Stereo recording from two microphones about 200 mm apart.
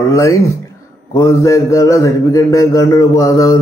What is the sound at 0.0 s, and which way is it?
Speech, 15° left (ahead or behind).